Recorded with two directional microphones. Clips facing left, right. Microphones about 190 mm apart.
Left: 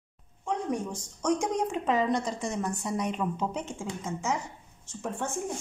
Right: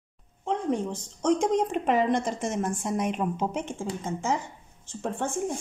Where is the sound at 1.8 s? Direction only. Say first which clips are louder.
Right 3 dB; 50° right (ahead or behind).